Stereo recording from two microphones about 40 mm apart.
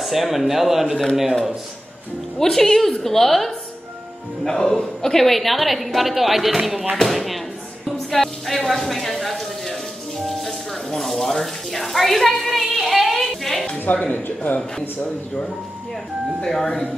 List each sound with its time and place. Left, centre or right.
0.0 s a woman's voice: centre
2.3 s a woman's voice: centre
10.9 s water tap: centre
13.9 s speech: left
16.4 s a woman's voice: centre